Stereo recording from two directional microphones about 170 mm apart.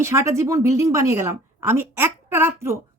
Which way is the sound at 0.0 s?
15° right (ahead or behind).